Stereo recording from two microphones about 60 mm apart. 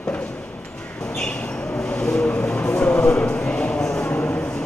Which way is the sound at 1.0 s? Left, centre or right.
Centre.